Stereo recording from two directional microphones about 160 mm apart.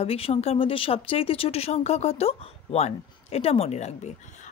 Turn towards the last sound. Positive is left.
turn(degrees=45)  # may be behind; listen again after turning